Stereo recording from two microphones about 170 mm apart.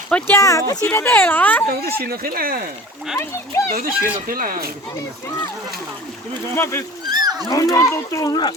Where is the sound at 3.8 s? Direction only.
60° right (ahead or behind).